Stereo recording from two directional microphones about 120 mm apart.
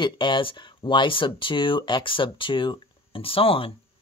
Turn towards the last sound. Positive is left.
turn(degrees=50)  # may be behind; listen again after turning